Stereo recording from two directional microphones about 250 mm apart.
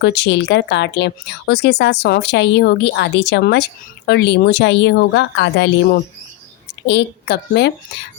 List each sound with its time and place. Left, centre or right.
0.0 s speech: left